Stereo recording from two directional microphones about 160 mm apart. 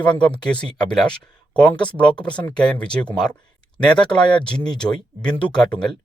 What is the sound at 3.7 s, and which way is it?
Speech, 30° left (ahead or behind).